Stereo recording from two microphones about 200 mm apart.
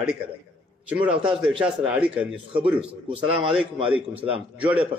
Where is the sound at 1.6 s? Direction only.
5° right (ahead or behind).